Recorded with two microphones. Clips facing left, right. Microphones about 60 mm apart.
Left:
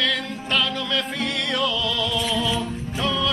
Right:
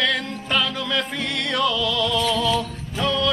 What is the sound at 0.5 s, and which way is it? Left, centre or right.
Music, centre.